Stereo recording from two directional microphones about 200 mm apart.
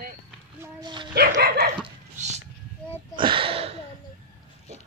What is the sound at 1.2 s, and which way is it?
Dog, 50° right (ahead or behind).